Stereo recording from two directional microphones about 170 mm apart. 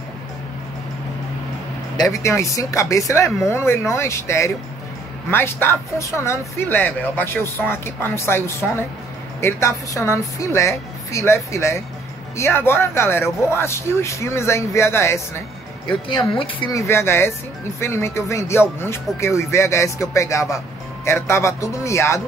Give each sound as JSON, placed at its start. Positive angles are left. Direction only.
{"t": 2.0, "sound": "speech", "side_deg": 20}
{"t": 15.9, "sound": "speech", "side_deg": 30}
{"t": 16.8, "sound": "speech", "side_deg": 15}